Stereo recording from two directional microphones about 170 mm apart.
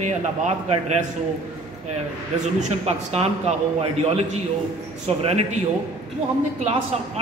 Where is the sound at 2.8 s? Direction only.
40° right (ahead or behind).